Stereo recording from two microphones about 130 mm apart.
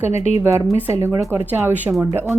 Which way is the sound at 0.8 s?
20° right (ahead or behind).